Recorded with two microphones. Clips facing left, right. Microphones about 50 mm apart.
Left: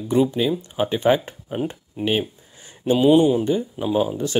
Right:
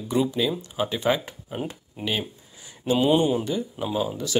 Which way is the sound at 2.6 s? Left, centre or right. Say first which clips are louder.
Left 4 dB; left.